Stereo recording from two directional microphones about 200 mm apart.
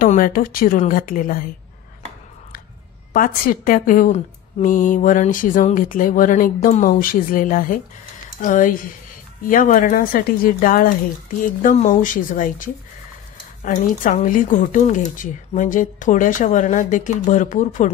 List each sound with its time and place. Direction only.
0.0 s a woman's voice: 45° left (ahead or behind)
3.1 s a woman's voice: 45° left (ahead or behind)